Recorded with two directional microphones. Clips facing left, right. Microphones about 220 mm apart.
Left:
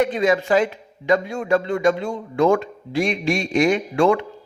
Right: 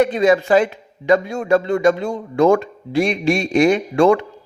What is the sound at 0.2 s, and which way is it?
A man's voice, 40° right (ahead or behind).